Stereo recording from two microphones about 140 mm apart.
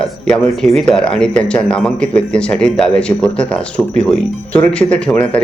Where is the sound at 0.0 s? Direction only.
5° left (ahead or behind).